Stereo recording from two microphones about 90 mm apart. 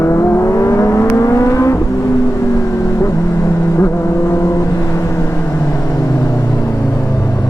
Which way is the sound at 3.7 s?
30° left (ahead or behind).